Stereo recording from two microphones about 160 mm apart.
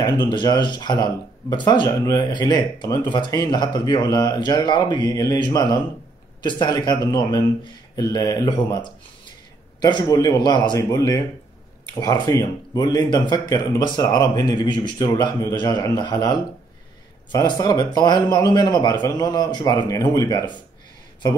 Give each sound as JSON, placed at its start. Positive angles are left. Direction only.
{"t": 0.0, "sound": "speech", "side_deg": 25}